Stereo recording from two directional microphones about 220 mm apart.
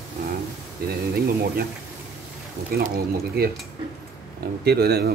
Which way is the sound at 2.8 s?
45° right (ahead or behind).